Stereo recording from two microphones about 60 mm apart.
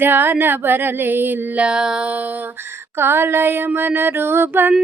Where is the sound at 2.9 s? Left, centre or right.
Right.